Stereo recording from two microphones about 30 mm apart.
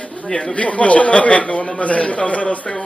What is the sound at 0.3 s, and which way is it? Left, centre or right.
Speech, left.